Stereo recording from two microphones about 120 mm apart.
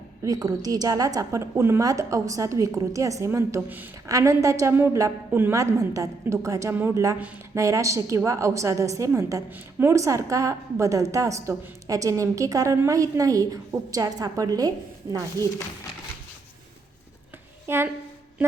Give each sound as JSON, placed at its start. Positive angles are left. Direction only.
{"t": 0.3, "sound": "a woman's voice", "side_deg": -30}
{"t": 15.4, "sound": "speech", "side_deg": 25}
{"t": 17.7, "sound": "a woman's voice", "side_deg": -20}